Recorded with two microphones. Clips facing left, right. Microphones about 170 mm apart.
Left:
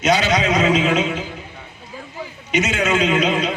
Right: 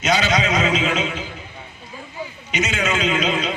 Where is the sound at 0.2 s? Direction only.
60° left (ahead or behind).